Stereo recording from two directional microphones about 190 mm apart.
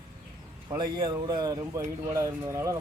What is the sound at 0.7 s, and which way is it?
Speech, 20° right (ahead or behind).